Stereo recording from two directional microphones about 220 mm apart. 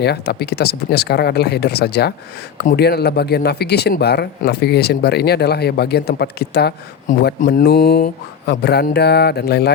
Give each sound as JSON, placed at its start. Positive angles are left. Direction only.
{"t": 0.0, "sound": "speech", "side_deg": 50}